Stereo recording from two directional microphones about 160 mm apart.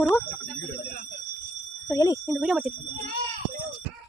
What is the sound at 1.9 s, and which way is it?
Speech, 25° left (ahead or behind).